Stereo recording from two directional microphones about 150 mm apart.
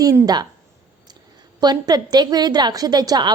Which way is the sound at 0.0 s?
20° right (ahead or behind).